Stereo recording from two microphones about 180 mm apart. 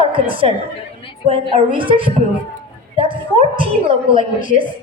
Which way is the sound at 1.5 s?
30° right (ahead or behind).